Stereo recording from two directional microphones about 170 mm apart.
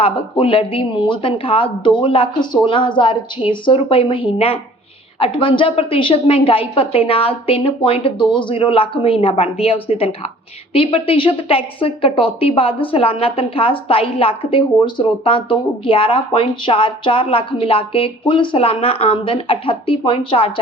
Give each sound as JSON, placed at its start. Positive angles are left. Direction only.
{"t": 0.0, "sound": "a woman's voice", "side_deg": 30}